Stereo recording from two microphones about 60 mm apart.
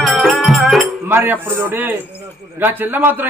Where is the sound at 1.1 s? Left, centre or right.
Right.